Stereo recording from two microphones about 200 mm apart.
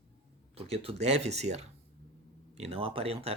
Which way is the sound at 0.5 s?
30° right (ahead or behind).